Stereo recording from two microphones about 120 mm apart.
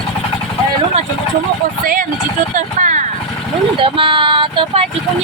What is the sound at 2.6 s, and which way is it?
Speech, 90° right.